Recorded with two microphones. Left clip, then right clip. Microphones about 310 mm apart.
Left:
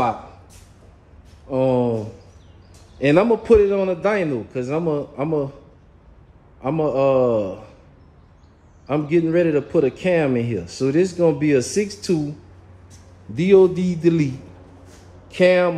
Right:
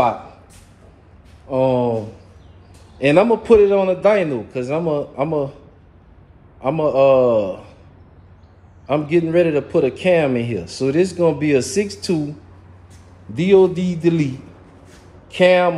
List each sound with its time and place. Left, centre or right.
1.5 s a man's voice: centre
3.0 s a man's voice: centre
6.6 s a man's voice: centre
8.8 s a man's voice: centre
13.7 s a man's voice: centre
15.3 s a man's voice: centre